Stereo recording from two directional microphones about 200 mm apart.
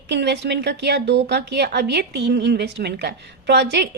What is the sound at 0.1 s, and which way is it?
A woman's voice, 60° right (ahead or behind).